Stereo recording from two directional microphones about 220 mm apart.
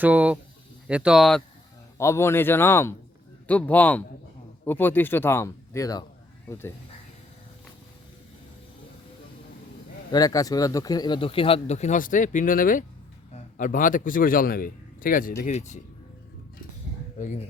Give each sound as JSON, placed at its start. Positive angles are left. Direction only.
{"t": 0.0, "sound": "speech", "side_deg": -5}
{"t": 2.0, "sound": "speech", "side_deg": 10}
{"t": 10.1, "sound": "a man's voice", "side_deg": 15}
{"t": 17.2, "sound": "speech", "side_deg": 35}